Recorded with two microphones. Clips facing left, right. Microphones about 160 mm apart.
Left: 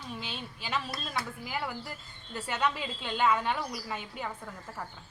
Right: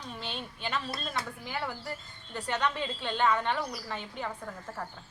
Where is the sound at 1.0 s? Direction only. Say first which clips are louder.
Even; 5° left (ahead or behind).